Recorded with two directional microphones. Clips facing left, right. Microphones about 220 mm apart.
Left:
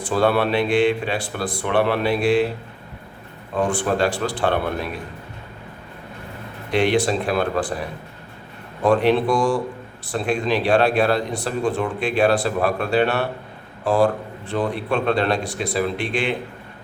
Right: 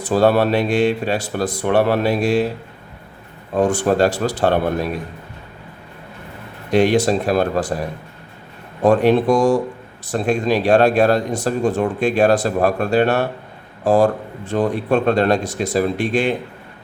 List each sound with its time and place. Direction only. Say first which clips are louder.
0.0 s speech: right 4 dB; 40° right (ahead or behind)
3.5 s speech: right 5 dB; 40° right (ahead or behind)
6.7 s speech: right 4 dB; 45° right (ahead or behind)